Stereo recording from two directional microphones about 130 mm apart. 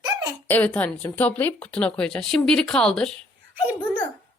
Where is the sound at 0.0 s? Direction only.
30° right (ahead or behind).